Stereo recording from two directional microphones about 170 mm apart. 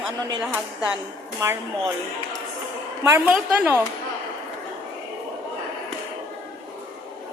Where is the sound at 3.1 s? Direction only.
10° right (ahead or behind).